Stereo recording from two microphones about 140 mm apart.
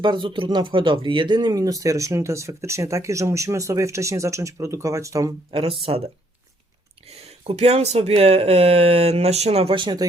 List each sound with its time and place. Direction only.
0.0 s speech: 35° right (ahead or behind)
5.5 s speech: 40° right (ahead or behind)
7.4 s speech: 50° right (ahead or behind); by 10.1 s 35° right (ahead or behind)